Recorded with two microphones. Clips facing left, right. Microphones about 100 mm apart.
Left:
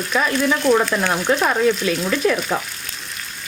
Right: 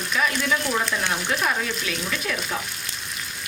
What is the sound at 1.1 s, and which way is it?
Speech, 40° left (ahead or behind).